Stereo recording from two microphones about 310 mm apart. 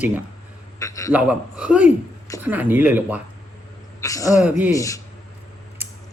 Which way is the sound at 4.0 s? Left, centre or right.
Centre.